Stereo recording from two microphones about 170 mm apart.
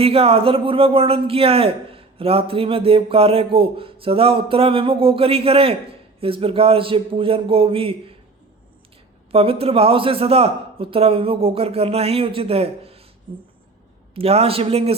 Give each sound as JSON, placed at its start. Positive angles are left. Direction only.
{"t": 0.0, "sound": "a man's voice", "side_deg": -35}
{"t": 9.3, "sound": "a man's voice", "side_deg": -35}
{"t": 13.3, "sound": "beatboxing", "side_deg": -30}
{"t": 14.2, "sound": "a man's voice", "side_deg": -35}